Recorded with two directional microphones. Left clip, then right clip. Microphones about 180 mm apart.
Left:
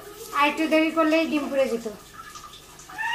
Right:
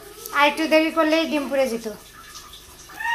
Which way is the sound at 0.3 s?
10° right (ahead or behind).